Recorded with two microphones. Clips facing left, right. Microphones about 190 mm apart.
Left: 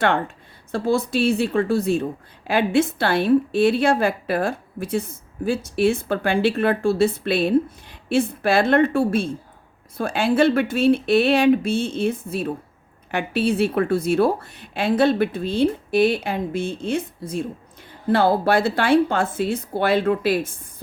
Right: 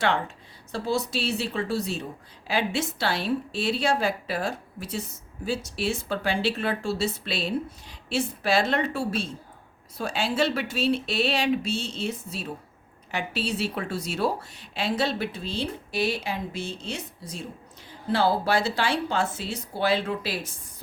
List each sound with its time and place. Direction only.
0.7 s a woman's voice: 55° left (ahead or behind)